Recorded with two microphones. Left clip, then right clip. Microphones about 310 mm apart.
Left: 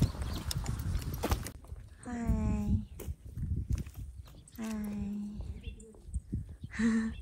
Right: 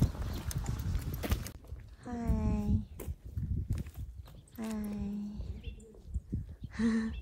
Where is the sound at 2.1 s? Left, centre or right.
Centre.